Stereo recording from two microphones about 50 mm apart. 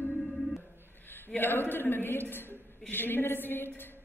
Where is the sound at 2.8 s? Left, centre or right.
Left.